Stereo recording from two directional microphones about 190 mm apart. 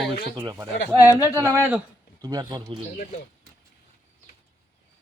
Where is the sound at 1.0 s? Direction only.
15° left (ahead or behind).